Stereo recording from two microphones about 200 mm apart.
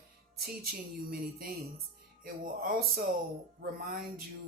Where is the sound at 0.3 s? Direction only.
50° right (ahead or behind).